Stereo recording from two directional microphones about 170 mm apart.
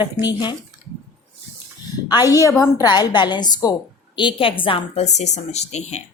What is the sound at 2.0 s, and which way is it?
A woman's voice, 20° left (ahead or behind).